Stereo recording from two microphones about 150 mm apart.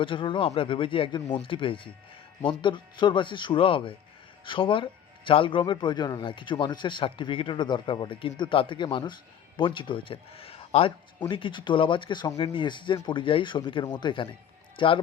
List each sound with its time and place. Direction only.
0.0 s speech: 35° left (ahead or behind)